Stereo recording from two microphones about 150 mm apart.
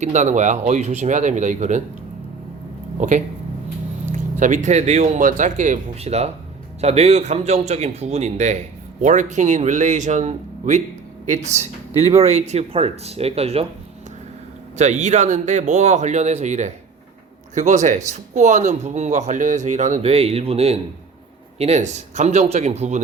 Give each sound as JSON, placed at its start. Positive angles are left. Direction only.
{"t": 0.0, "sound": "a man's voice", "side_deg": -50}
{"t": 3.0, "sound": "a man's voice", "side_deg": -55}
{"t": 14.8, "sound": "a man's voice", "side_deg": -50}